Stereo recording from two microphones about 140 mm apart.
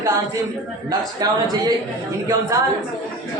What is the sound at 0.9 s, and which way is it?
Speech, 30° right (ahead or behind).